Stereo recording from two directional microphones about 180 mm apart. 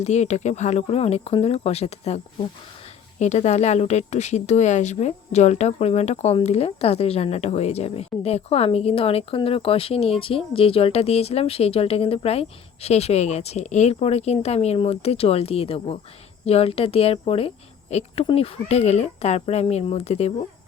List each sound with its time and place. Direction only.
0.0 s speech: 40° left (ahead or behind)